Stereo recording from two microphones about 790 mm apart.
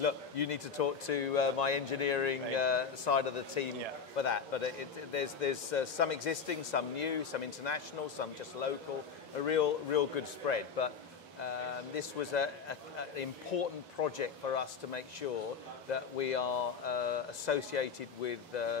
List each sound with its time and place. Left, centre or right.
0.0 s a man's voice: left